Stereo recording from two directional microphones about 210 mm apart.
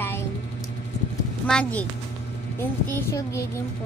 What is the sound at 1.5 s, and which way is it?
Speech, 5° left (ahead or behind).